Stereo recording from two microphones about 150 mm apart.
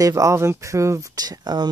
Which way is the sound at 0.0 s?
20° right (ahead or behind).